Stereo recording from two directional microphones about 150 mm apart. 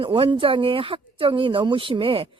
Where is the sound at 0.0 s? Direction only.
35° right (ahead or behind).